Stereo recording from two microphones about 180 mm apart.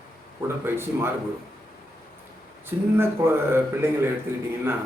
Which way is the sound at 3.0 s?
10° right (ahead or behind).